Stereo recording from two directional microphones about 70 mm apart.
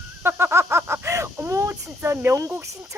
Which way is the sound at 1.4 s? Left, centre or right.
Right.